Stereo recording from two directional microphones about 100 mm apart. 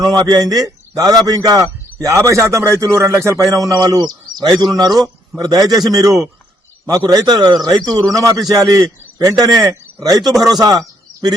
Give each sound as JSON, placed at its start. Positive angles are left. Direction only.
{"t": 0.0, "sound": "a man's voice", "side_deg": -45}